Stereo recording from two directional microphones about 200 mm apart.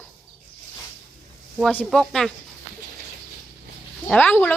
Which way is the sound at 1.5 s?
5° left (ahead or behind).